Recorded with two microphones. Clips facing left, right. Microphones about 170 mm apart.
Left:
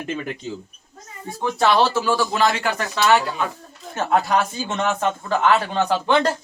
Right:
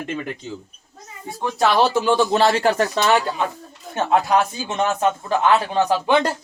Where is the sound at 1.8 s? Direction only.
15° right (ahead or behind); by 3.4 s 30° right (ahead or behind).